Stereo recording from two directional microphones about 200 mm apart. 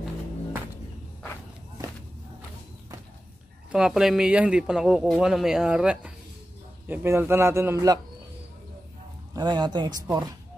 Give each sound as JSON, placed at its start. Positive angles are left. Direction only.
{"t": 3.7, "sound": "a man's voice", "side_deg": -5}
{"t": 9.3, "sound": "speech", "side_deg": -20}